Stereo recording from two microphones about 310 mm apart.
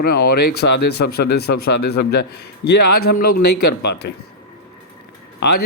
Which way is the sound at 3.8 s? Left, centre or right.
Left.